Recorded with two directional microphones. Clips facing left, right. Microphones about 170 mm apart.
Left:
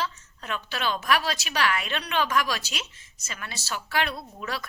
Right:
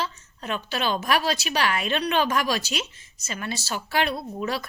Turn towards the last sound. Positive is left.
turn(degrees=-25)  # may be behind; listen again after turning